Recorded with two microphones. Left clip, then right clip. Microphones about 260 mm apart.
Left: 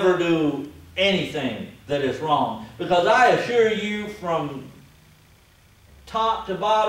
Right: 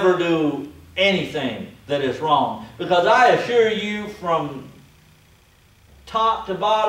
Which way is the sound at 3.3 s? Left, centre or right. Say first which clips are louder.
Right 2 dB; centre.